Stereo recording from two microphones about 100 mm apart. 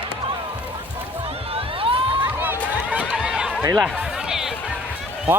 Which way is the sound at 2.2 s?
20° right (ahead or behind).